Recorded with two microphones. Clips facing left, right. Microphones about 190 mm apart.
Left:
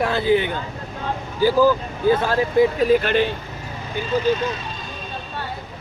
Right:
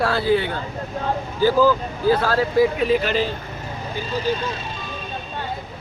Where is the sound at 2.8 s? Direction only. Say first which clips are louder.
Left 3 dB; 50° left (ahead or behind).